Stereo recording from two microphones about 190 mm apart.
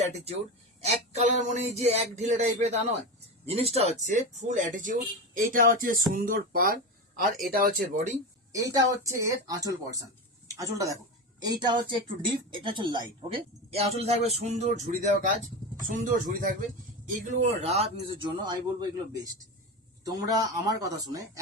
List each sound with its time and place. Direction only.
0.0 s speech: 35° right (ahead or behind); by 8.1 s 50° right (ahead or behind)
8.5 s a woman's voice: 20° right (ahead or behind)